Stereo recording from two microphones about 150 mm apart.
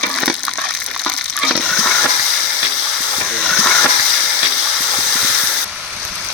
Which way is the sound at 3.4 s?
10° left (ahead or behind).